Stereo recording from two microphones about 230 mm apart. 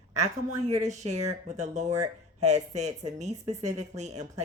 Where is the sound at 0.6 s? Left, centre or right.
Right.